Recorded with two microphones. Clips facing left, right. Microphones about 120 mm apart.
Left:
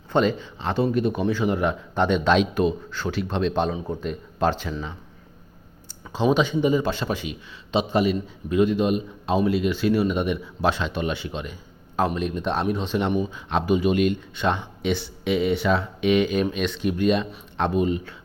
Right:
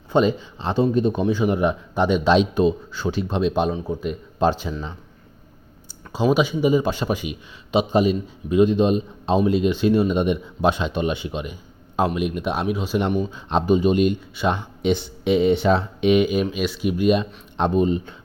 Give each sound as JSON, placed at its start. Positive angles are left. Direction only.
{"t": 0.1, "sound": "a man's voice", "side_deg": -15}
{"t": 4.4, "sound": "speech", "side_deg": -15}
{"t": 4.7, "sound": "a man's voice", "side_deg": 0}
{"t": 6.3, "sound": "speech", "side_deg": -10}
{"t": 13.1, "sound": "speech", "side_deg": 10}
{"t": 13.5, "sound": "speech", "side_deg": -25}
{"t": 17.7, "sound": "speech", "side_deg": -30}